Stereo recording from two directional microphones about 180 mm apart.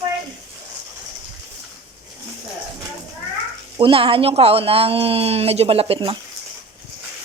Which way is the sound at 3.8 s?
30° right (ahead or behind).